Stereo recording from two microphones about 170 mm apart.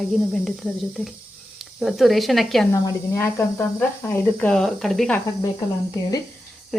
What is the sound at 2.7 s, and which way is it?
Speech, 15° left (ahead or behind).